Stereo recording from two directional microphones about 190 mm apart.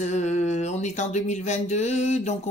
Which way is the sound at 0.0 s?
40° left (ahead or behind).